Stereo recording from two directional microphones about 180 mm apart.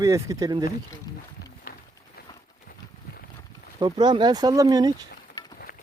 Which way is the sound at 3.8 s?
25° right (ahead or behind).